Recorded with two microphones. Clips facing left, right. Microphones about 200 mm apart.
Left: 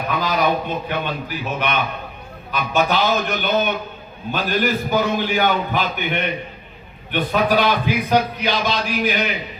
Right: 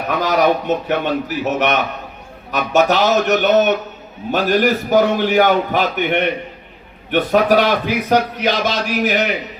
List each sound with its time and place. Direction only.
0.1 s a man's voice: 75° right (ahead or behind)